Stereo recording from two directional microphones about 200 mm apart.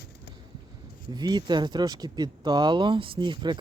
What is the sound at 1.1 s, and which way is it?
Speech, 20° right (ahead or behind).